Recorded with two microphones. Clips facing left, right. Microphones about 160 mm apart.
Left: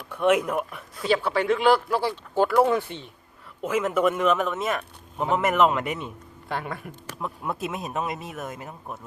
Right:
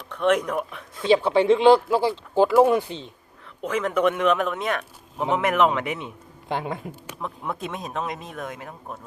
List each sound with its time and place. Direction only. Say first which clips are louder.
0.1 s speech: even; 10° left (ahead or behind)
1.1 s speech: right 5 dB; 20° right (ahead or behind)
3.6 s speech: even; 5° left (ahead or behind)
6.5 s speech: right 3 dB; 20° right (ahead or behind)
7.2 s speech: left 1 dB; 5° left (ahead or behind)